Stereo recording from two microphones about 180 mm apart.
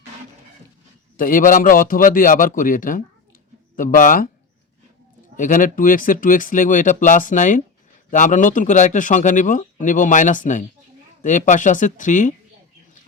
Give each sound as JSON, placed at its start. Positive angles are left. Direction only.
{"t": 1.1, "sound": "a man's voice", "side_deg": 50}
{"t": 5.4, "sound": "a man's voice", "side_deg": 45}